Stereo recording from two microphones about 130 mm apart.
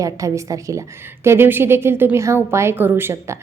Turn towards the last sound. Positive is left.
turn(degrees=-20)  # may be behind; listen again after turning